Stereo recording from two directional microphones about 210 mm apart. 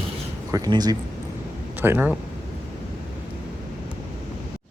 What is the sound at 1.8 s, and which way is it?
Speech, 10° right (ahead or behind).